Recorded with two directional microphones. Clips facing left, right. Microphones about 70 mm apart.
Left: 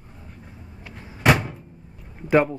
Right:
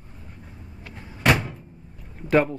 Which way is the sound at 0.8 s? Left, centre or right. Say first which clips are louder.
Left 2 dB; centre.